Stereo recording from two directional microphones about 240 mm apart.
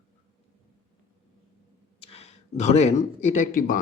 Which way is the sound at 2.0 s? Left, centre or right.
Left.